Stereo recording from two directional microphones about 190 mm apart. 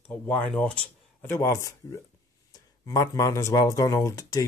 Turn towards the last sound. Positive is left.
turn(degrees=20)  # may be behind; listen again after turning